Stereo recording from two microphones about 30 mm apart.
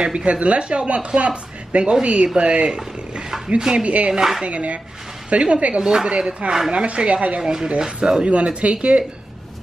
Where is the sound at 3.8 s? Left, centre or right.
Right.